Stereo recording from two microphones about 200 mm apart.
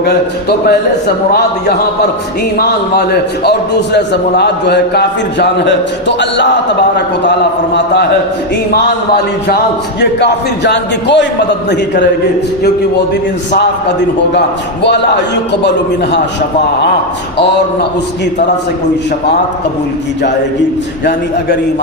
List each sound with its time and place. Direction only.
0.6 s a man's voice: 50° left (ahead or behind)
14.8 s a man's voice: 60° left (ahead or behind)